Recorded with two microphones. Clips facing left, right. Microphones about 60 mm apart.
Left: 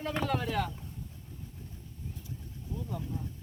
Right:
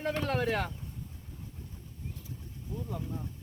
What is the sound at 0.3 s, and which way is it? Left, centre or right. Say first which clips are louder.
Speech: right 2 dB; right.